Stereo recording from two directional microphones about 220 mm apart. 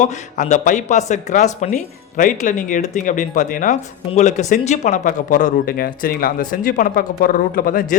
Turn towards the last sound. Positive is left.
turn(degrees=40)  # may be behind; listen again after turning